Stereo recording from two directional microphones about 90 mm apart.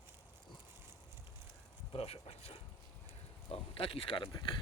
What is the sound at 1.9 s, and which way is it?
Speech, 90° left.